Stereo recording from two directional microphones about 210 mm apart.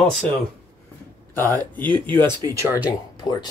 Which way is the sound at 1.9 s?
25° right (ahead or behind).